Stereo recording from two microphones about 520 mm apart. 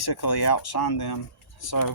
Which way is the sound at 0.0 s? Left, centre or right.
Left.